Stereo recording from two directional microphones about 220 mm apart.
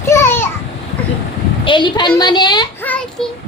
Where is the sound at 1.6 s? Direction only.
20° left (ahead or behind).